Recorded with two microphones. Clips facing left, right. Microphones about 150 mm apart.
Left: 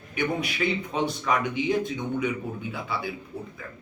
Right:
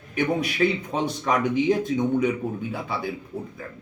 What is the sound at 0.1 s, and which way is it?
Speech, 40° right (ahead or behind).